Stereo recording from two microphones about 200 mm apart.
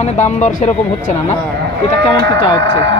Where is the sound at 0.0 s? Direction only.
35° left (ahead or behind).